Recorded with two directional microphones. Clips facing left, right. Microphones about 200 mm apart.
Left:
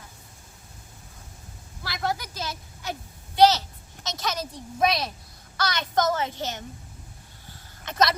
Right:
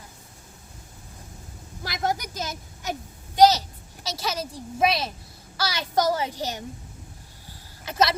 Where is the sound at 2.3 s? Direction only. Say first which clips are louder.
Right 1 dB; 45° right (ahead or behind).